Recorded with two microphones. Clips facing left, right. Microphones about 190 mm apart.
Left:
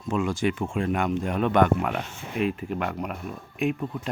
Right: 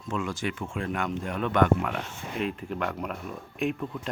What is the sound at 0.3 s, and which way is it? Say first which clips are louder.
Speech: left 6 dB; 15° left (ahead or behind).